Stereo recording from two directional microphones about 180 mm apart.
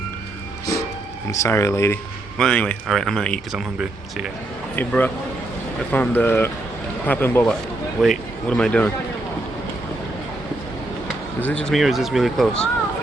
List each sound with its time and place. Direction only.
1.3 s speech: 15° left (ahead or behind); by 4.3 s centre (ahead or behind)
4.8 s speech: 10° left (ahead or behind)
11.4 s speech: 5° left (ahead or behind)